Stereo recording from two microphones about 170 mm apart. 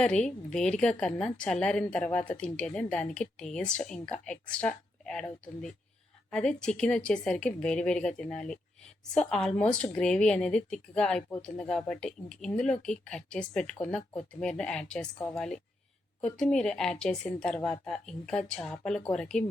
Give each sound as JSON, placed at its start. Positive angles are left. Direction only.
{"t": 0.0, "sound": "a woman's voice", "side_deg": 5}
{"t": 6.3, "sound": "a woman's voice", "side_deg": 5}